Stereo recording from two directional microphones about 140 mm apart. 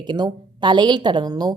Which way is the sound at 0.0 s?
30° right (ahead or behind).